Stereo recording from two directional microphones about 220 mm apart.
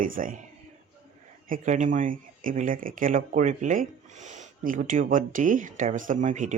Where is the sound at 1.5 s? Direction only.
35° right (ahead or behind).